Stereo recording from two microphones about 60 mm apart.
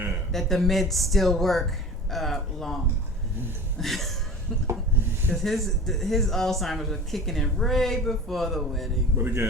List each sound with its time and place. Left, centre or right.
0.3 s speech: centre
3.8 s speech: centre
5.3 s speech: centre
9.1 s speech: right